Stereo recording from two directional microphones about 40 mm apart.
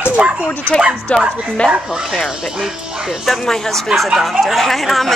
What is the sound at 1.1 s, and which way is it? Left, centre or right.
Speech, left.